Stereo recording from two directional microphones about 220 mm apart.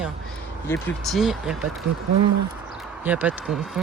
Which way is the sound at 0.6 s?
10° left (ahead or behind).